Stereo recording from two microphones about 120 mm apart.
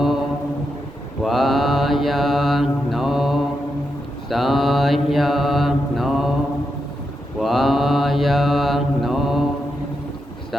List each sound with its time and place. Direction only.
0.0 s mantra: centre (ahead or behind)
7.3 s mantra: centre (ahead or behind)